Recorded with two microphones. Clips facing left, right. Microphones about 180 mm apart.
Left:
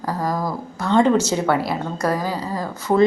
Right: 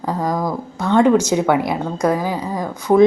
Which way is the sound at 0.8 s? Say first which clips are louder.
Right 3 dB; 5° right (ahead or behind).